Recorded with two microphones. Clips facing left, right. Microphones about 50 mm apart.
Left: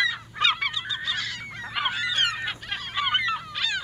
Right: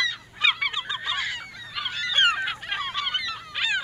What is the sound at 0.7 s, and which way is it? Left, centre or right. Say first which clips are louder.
Goose: even; right.